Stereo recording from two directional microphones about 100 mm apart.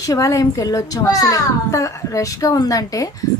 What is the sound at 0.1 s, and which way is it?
Speech, 30° left (ahead or behind).